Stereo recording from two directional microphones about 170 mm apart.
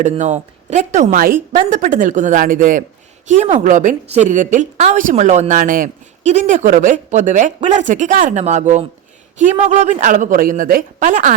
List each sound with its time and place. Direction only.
0.0 s a woman's voice: 40° right (ahead or behind)